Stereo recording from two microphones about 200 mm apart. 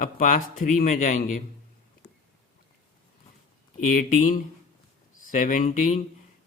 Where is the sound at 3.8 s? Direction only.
45° left (ahead or behind).